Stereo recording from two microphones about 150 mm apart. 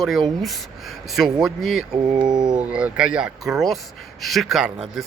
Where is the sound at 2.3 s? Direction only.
30° right (ahead or behind).